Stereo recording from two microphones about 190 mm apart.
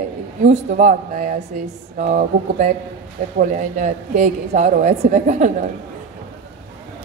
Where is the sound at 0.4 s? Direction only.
40° right (ahead or behind).